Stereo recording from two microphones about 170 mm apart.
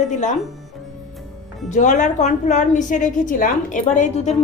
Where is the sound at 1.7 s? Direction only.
45° left (ahead or behind).